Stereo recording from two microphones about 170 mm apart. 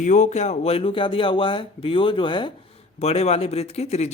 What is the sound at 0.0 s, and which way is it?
Speech, 45° left (ahead or behind).